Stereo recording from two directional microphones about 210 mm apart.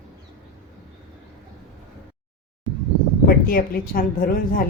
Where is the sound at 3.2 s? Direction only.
45° left (ahead or behind).